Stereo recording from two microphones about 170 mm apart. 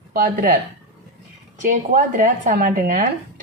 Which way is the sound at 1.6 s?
50° right (ahead or behind).